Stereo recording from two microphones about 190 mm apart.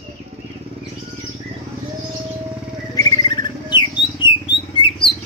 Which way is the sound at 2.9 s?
20° left (ahead or behind).